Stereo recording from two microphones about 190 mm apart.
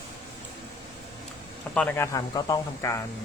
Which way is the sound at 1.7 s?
10° left (ahead or behind).